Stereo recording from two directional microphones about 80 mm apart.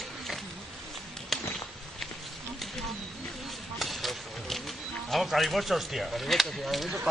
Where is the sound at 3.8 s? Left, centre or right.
Centre.